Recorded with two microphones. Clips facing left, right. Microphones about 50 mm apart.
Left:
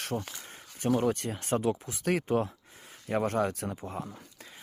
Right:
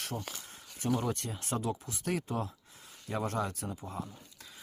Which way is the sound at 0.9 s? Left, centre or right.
Left.